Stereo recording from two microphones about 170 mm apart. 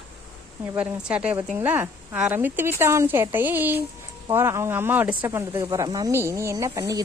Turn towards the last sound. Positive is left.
turn(degrees=-20)  # may be behind; listen again after turning